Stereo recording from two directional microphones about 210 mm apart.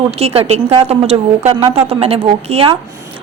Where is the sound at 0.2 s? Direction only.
30° right (ahead or behind).